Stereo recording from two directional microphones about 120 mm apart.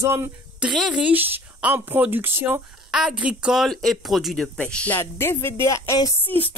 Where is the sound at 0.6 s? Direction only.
5° right (ahead or behind); by 6.1 s 25° left (ahead or behind).